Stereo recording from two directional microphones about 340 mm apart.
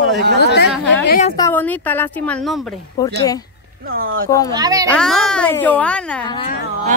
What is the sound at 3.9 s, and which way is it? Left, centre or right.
Speech, right.